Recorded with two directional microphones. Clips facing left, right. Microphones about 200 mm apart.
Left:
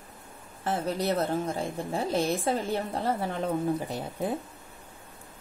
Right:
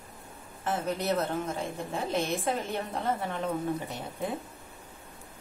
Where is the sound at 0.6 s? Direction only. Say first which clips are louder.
Left 2 dB; 35° left (ahead or behind).